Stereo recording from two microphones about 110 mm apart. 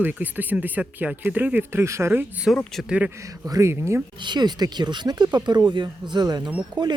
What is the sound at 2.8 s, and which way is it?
Speech, 10° right (ahead or behind).